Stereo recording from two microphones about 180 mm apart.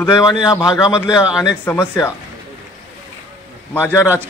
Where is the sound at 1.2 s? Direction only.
5° right (ahead or behind).